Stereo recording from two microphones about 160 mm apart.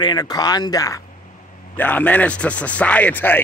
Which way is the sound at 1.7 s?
10° left (ahead or behind).